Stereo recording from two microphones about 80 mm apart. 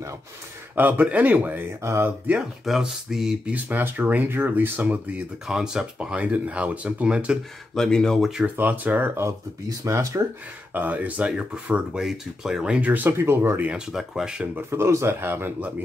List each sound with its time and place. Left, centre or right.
0.7 s speech: right
1.8 s speech: right
2.6 s speech: centre
3.5 s speech: right
5.5 s speech: centre
7.7 s speech: centre
8.5 s speech: right
9.7 s speech: right
10.7 s speech: right
13.7 s speech: centre
14.7 s speech: right